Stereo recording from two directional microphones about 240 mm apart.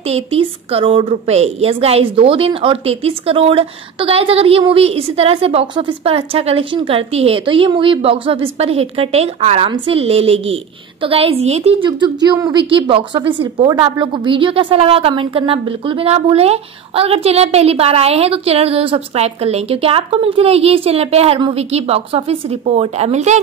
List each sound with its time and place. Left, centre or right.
0.0 s a woman's voice: right